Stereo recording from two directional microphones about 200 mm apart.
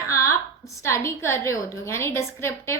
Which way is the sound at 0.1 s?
15° left (ahead or behind).